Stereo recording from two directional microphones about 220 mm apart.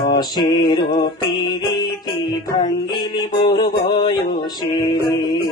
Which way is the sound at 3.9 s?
20° left (ahead or behind).